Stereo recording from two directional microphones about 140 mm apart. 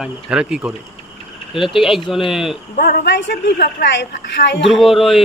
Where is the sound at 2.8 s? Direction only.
90° left.